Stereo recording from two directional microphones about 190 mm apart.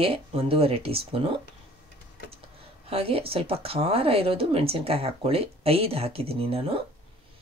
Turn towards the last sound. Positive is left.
turn(degrees=-30)  # may be behind; listen again after turning